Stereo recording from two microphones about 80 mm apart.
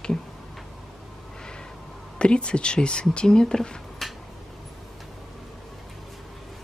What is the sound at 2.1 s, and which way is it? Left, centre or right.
Speech, centre.